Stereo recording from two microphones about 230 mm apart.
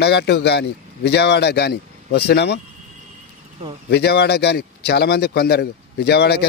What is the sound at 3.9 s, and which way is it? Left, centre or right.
A man's voice, left.